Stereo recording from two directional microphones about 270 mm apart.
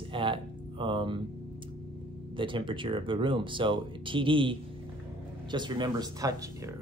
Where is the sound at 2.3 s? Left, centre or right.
Centre.